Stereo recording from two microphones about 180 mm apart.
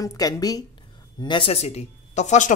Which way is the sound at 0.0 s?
20° left (ahead or behind).